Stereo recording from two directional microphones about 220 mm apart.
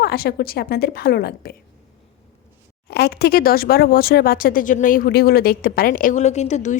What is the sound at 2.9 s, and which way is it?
Speech, 50° left (ahead or behind).